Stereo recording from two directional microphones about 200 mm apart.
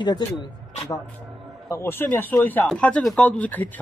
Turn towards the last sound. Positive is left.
turn(degrees=10)  # may be behind; listen again after turning